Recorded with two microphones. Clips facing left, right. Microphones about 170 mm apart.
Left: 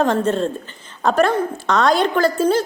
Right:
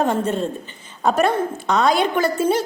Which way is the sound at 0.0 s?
5° right (ahead or behind).